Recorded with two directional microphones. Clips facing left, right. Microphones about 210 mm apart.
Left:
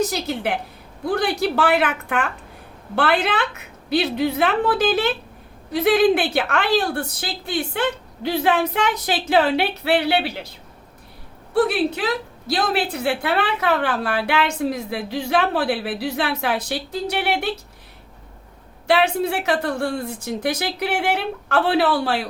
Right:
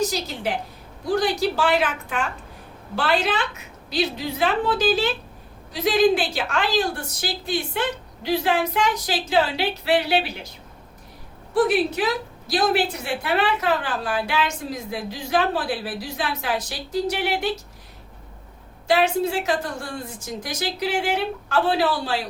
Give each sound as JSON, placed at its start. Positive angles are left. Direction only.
{"t": 0.1, "sound": "a woman's voice", "side_deg": 60}
{"t": 11.5, "sound": "a woman's voice", "side_deg": 60}
{"t": 18.9, "sound": "a woman's voice", "side_deg": 60}